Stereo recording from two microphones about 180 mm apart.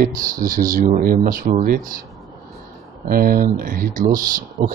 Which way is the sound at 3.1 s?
50° right (ahead or behind).